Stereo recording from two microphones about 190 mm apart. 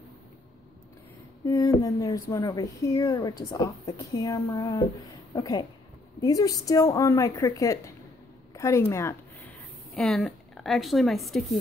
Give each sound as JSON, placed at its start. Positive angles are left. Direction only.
{"t": 1.5, "sound": "speech", "side_deg": 20}
{"t": 9.9, "sound": "speech", "side_deg": 0}